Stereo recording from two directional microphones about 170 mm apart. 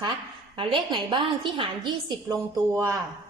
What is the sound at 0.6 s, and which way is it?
A woman's voice, 30° right (ahead or behind).